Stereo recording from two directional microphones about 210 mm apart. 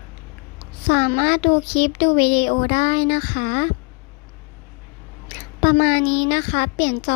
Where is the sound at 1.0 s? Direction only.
45° left (ahead or behind).